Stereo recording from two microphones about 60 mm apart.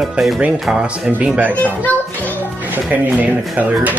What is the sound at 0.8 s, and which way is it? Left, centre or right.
Speech, right.